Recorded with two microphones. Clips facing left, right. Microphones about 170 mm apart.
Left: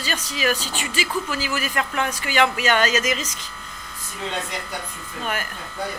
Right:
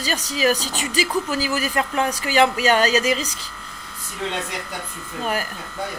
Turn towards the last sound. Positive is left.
turn(degrees=-35)  # may be behind; listen again after turning